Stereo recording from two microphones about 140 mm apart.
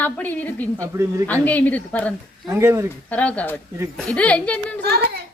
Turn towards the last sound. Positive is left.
turn(degrees=10)  # may be behind; listen again after turning